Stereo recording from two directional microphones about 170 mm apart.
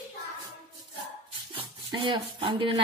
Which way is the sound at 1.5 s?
30° right (ahead or behind).